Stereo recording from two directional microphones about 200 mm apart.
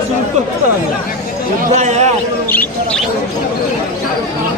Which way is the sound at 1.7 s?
35° right (ahead or behind).